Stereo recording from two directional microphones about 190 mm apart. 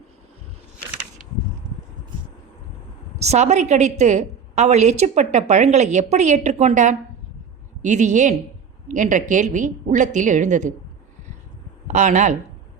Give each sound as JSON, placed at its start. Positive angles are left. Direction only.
{"t": 3.2, "sound": "a woman's voice", "side_deg": -35}
{"t": 11.9, "sound": "a woman's voice", "side_deg": -40}